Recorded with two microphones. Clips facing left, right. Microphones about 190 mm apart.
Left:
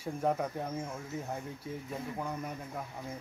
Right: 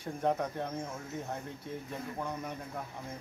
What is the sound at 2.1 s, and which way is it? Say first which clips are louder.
Speech: right 2 dB; 5° left (ahead or behind).